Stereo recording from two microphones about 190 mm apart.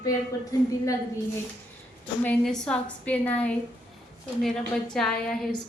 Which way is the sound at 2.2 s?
5° left (ahead or behind).